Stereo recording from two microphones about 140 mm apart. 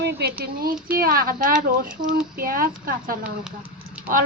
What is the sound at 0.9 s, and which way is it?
Speech, 90° right.